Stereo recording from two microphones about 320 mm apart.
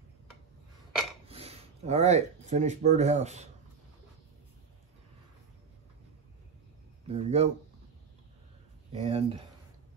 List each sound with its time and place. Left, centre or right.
1.2 s speech: centre
7.1 s speech: centre
8.9 s speech: centre